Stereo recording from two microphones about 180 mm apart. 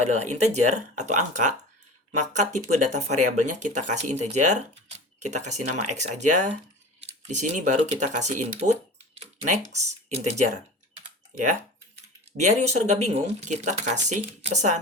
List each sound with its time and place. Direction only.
0.0 s speech: 40° right (ahead or behind)
12.4 s speech: 40° right (ahead or behind)